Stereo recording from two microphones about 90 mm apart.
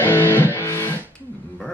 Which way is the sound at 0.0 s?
25° left (ahead or behind).